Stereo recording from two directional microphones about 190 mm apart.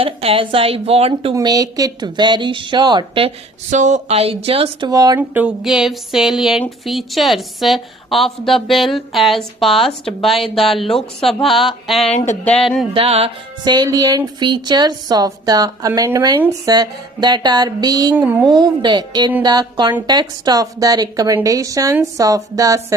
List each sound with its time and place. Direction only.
0.0 s speech: 30° right (ahead or behind)
1.4 s speech: 20° right (ahead or behind)
4.9 s speech: 20° right (ahead or behind)
5.3 s a woman's voice: 5° right (ahead or behind)
12.1 s a sound: 40° left (ahead or behind)
12.6 s a woman's voice: centre (ahead or behind)
12.9 s speech: 30° right (ahead or behind)
18.2 s a woman's voice: 5° right (ahead or behind)
18.4 s a woman's voice: 20° right (ahead or behind)